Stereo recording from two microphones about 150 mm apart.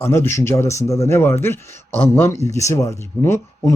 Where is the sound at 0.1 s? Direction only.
20° left (ahead or behind).